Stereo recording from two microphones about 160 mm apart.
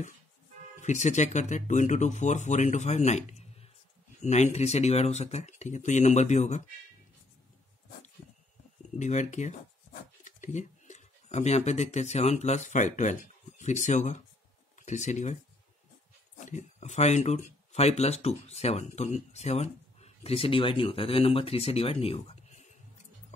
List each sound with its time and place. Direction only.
0.7 s speech: 45° left (ahead or behind)
8.9 s speech: 50° left (ahead or behind)
16.3 s speech: 45° left (ahead or behind)